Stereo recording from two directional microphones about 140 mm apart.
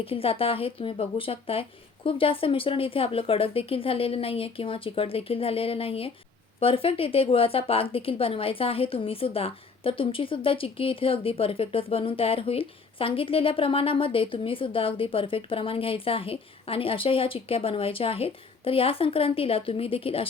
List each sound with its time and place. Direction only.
0.0 s a woman's voice: 40° left (ahead or behind)